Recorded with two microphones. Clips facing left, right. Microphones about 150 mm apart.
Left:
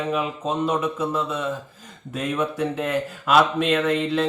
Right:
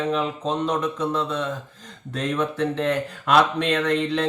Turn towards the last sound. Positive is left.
turn(degrees=5)  # may be behind; listen again after turning